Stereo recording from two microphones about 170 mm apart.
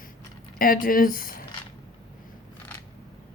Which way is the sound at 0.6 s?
55° left (ahead or behind).